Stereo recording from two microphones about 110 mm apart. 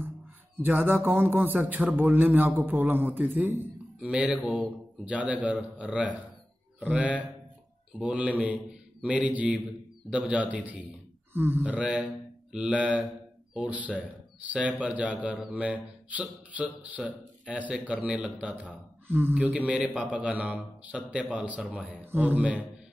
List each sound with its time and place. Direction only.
0.6 s a man's voice: 20° right (ahead or behind)